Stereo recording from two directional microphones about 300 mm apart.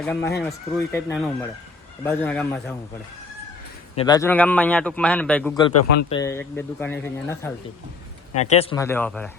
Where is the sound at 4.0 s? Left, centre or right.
Centre.